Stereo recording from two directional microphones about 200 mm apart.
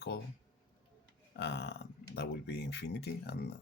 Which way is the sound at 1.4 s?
55° left (ahead or behind).